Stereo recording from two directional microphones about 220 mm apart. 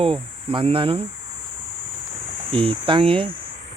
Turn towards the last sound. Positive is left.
turn(degrees=-25)  # may be behind; listen again after turning